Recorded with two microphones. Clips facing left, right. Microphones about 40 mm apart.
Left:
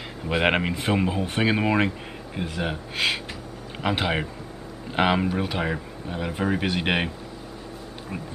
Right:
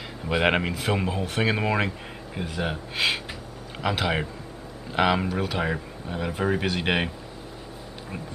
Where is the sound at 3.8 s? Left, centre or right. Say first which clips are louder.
Left 1 dB; centre.